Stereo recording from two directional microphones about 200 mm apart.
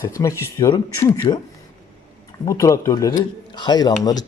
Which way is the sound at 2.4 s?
15° left (ahead or behind).